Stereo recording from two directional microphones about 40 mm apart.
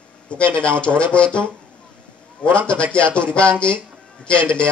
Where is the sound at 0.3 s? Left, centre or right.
Left.